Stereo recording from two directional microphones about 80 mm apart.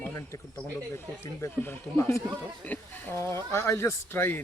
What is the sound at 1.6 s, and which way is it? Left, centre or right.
Speech, left.